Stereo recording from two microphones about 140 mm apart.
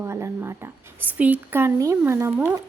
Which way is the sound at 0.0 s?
20° right (ahead or behind).